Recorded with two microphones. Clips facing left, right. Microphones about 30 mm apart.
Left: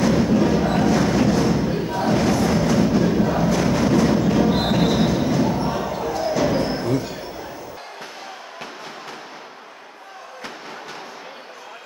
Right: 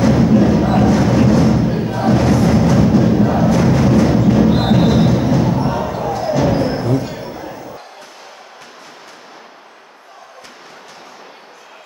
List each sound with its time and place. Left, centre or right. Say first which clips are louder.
0.0 s music: right 5 dB; centre